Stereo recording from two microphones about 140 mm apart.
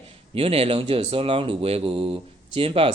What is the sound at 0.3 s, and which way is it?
Speech, 45° right (ahead or behind).